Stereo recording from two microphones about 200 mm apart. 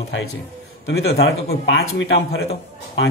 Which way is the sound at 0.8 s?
55° left (ahead or behind).